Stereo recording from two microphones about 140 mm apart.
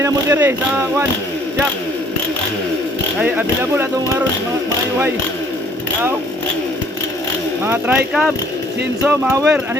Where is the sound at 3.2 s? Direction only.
10° right (ahead or behind).